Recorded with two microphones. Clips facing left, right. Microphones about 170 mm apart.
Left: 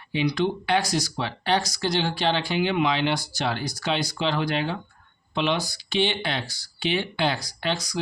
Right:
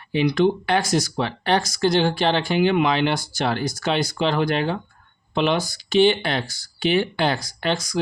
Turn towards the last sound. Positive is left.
turn(degrees=-50)  # may be behind; listen again after turning